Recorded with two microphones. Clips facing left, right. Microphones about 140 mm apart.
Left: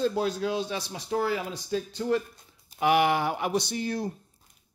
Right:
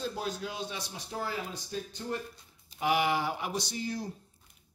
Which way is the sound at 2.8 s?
65° left (ahead or behind).